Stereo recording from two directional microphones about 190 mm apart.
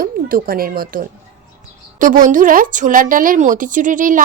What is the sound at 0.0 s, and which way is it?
A woman's voice, 50° right (ahead or behind).